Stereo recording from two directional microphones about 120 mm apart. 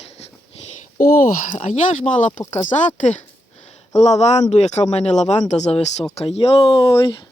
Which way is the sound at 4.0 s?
65° left (ahead or behind).